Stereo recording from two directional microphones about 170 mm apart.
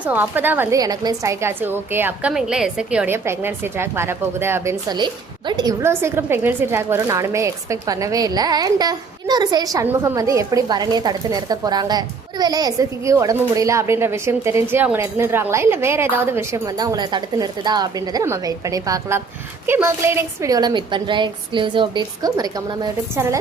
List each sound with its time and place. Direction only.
0.0 s a woman's voice: 10° right (ahead or behind)